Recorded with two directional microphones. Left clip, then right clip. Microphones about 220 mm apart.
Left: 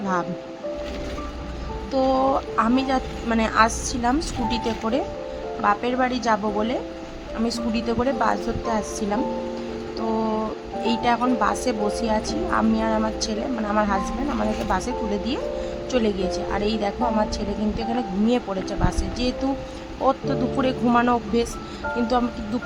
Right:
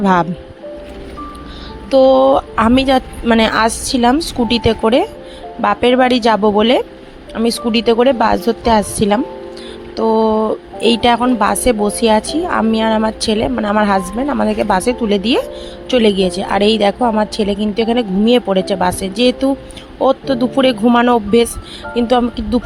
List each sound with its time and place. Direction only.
0.0 s a woman's voice: 35° right (ahead or behind)
1.9 s a woman's voice: 30° right (ahead or behind)
10.2 s music: 30° right (ahead or behind)
10.8 s a woman's voice: 30° right (ahead or behind)